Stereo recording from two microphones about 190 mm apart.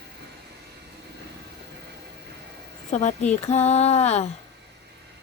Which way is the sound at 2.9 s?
40° left (ahead or behind).